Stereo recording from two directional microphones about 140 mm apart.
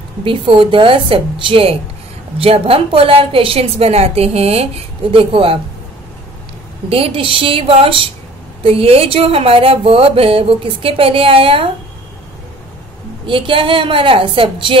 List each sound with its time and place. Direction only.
0.2 s speech: 40° right (ahead or behind)
6.9 s speech: 40° right (ahead or behind)
13.3 s speech: 40° right (ahead or behind)